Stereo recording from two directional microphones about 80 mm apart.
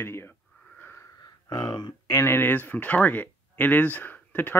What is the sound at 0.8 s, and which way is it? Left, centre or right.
Wheeze, left.